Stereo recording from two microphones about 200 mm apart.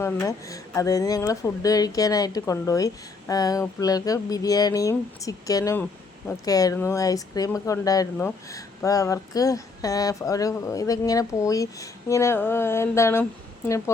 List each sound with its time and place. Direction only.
0.0 s speech: 15° left (ahead or behind)